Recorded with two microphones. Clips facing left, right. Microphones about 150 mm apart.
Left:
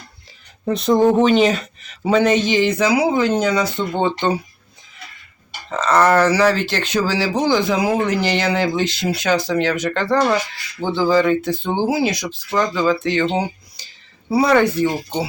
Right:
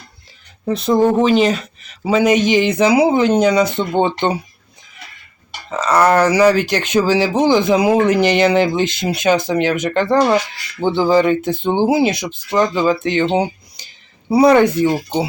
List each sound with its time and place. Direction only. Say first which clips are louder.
0.6 s speech: right 1 dB; centre (ahead or behind); by 4.4 s 20° right (ahead or behind)
5.7 s speech: right 1 dB; 10° right (ahead or behind)